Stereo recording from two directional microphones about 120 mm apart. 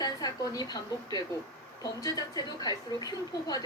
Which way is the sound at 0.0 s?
30° left (ahead or behind).